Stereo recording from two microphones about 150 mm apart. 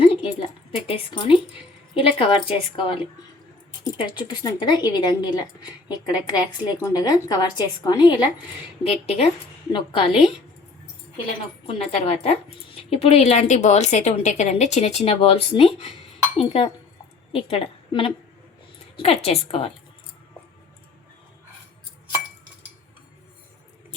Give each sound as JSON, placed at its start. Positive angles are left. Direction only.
{"t": 0.0, "sound": "a sound", "side_deg": 40}
{"t": 0.9, "sound": "a woman's voice", "side_deg": 35}
{"t": 8.8, "sound": "a woman's voice", "side_deg": 40}
{"t": 11.6, "sound": "a woman's voice", "side_deg": 40}